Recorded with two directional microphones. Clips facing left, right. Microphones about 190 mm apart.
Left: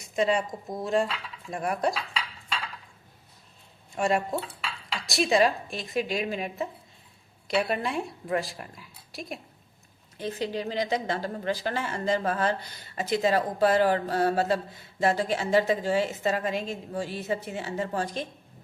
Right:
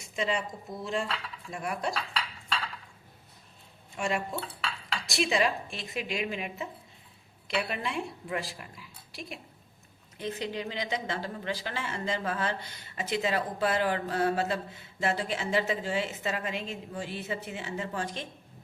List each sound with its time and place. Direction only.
0.0 s a woman's voice: 40° left (ahead or behind)
1.5 s dishes: 45° left (ahead or behind)
3.9 s a woman's voice: 40° left (ahead or behind)
4.4 s dishes: 5° left (ahead or behind)
5.0 s a woman's voice: 40° left (ahead or behind)
10.2 s a woman's voice: 35° left (ahead or behind)